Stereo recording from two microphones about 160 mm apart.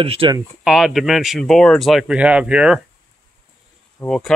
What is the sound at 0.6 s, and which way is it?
Speech, centre (ahead or behind).